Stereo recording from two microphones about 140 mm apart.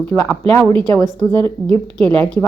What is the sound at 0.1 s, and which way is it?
A woman's voice, 10° left (ahead or behind).